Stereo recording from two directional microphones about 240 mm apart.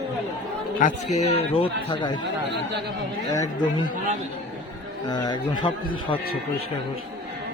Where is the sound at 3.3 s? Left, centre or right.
Centre.